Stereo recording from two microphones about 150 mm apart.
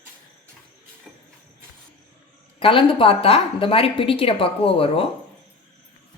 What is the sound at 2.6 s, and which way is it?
A woman's voice, 35° left (ahead or behind).